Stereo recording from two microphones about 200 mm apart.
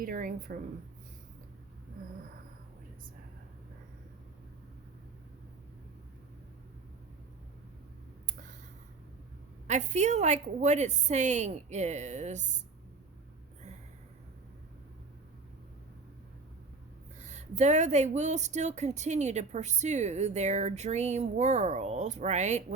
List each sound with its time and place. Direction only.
0.0 s a woman's voice: 45° right (ahead or behind)
9.6 s speech: 35° right (ahead or behind)
17.2 s speech: 35° right (ahead or behind)